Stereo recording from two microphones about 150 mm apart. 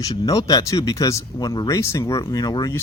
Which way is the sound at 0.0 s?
25° left (ahead or behind).